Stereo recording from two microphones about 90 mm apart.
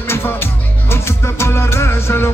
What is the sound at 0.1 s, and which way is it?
Music, 30° left (ahead or behind).